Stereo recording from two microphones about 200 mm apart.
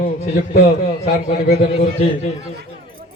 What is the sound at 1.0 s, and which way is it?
A man's voice, 50° left (ahead or behind).